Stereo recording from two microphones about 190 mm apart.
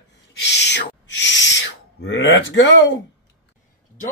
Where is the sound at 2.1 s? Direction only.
70° left (ahead or behind).